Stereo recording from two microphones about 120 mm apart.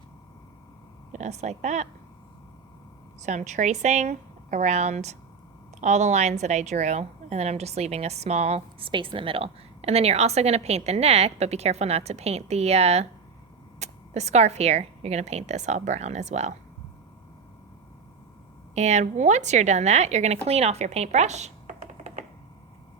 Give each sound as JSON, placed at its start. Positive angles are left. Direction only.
{"t": 1.1, "sound": "speech", "side_deg": -75}
{"t": 3.2, "sound": "a woman's voice", "side_deg": -80}
{"t": 8.9, "sound": "a woman's voice", "side_deg": -45}
{"t": 18.7, "sound": "speech", "side_deg": -70}